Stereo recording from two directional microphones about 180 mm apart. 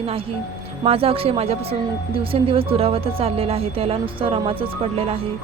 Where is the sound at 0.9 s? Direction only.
30° right (ahead or behind).